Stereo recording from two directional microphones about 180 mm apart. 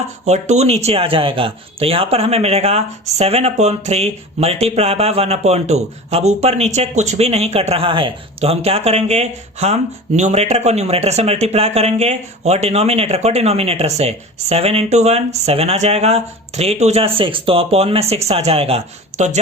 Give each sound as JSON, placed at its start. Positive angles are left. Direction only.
{"t": 0.3, "sound": "speech", "side_deg": -40}